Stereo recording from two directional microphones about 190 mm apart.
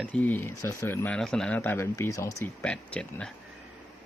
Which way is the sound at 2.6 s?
5° left (ahead or behind).